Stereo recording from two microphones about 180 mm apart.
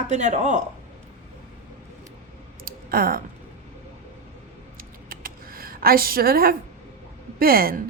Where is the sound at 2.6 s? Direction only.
55° right (ahead or behind).